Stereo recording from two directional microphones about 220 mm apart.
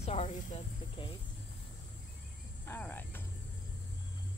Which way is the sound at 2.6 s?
10° left (ahead or behind).